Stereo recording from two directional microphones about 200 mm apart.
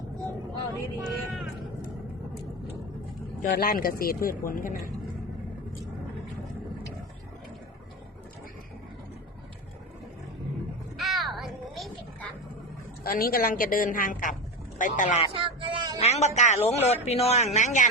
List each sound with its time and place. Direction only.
0.7 s vehicle: 10° right (ahead or behind)
3.5 s a woman's voice: 45° left (ahead or behind)
10.9 s a sound: centre (ahead or behind)
13.1 s a woman's voice: 45° left (ahead or behind)
15.3 s a sound: 25° right (ahead or behind)
16.0 s speech: 30° left (ahead or behind)